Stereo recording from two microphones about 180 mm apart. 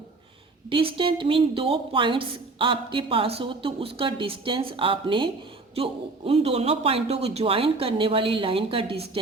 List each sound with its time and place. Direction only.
0.7 s a woman's voice: 30° right (ahead or behind)